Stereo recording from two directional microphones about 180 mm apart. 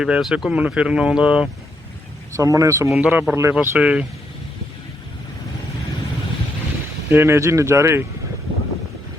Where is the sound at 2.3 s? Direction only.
15° right (ahead or behind).